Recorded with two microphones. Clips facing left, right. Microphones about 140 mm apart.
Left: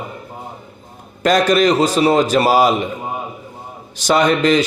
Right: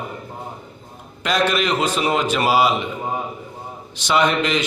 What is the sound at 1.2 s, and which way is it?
A man's voice, 40° left (ahead or behind).